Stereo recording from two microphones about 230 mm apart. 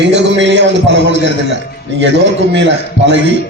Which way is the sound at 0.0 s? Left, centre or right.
Right.